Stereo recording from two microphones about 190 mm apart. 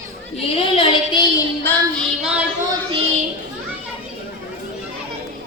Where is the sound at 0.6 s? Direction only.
25° left (ahead or behind).